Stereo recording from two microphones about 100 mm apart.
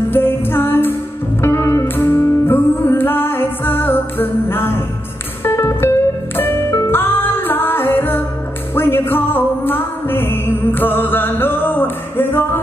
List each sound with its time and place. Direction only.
0.1 s music: 20° left (ahead or behind)